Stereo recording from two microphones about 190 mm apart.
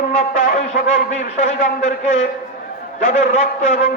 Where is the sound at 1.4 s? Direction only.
40° left (ahead or behind).